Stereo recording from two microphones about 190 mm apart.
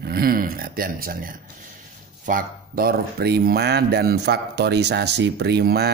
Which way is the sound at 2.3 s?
50° right (ahead or behind).